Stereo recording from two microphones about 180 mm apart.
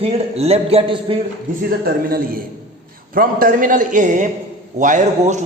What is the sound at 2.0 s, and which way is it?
A man's voice, 55° right (ahead or behind).